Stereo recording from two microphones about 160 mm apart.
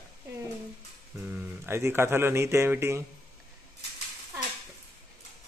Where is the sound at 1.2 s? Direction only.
15° right (ahead or behind).